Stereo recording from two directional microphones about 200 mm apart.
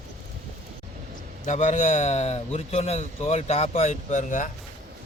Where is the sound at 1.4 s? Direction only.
35° left (ahead or behind).